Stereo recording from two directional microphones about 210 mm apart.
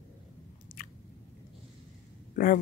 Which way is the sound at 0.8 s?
40° left (ahead or behind).